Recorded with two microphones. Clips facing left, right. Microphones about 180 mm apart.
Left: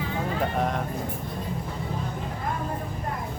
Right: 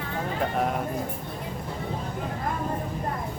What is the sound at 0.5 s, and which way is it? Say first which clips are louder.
Speech: right 2 dB; 5° right (ahead or behind).